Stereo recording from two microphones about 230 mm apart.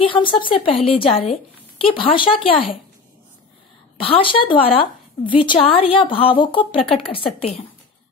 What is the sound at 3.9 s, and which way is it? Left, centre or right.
Speech, left.